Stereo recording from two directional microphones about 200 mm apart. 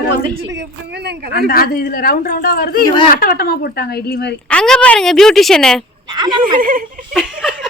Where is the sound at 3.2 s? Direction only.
50° left (ahead or behind).